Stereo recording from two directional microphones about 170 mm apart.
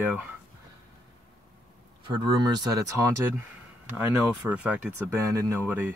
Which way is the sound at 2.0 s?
25° right (ahead or behind).